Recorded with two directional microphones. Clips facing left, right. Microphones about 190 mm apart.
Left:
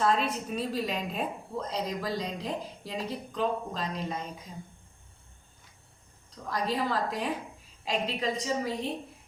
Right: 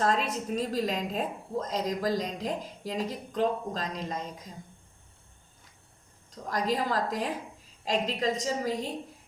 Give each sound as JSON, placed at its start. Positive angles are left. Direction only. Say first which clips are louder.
{"t": 0.0, "sound": "a woman's voice", "louder": "even", "side_deg": -40}
{"t": 6.3, "sound": "a woman's voice", "louder": "right 2 dB", "side_deg": -40}